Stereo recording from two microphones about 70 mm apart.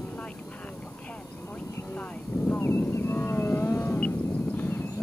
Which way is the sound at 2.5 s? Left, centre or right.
Left.